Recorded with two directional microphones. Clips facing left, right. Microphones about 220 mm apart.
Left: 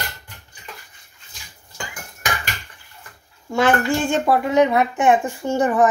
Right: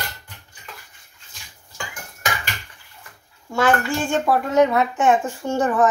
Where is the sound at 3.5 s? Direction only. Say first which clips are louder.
Left 2 dB; 15° left (ahead or behind).